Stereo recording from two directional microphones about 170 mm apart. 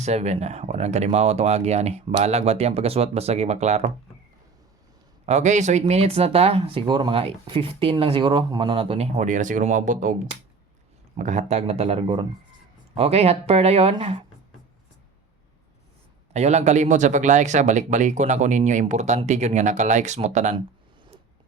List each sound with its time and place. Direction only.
0.0 s speech: 40° right (ahead or behind)
5.2 s speech: 40° right (ahead or behind)
11.2 s speech: 45° right (ahead or behind)
16.3 s speech: 40° right (ahead or behind)